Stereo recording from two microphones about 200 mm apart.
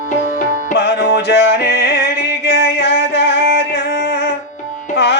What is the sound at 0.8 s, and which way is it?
Music, 55° left (ahead or behind).